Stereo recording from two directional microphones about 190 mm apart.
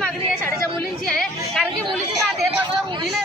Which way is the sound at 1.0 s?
5° left (ahead or behind).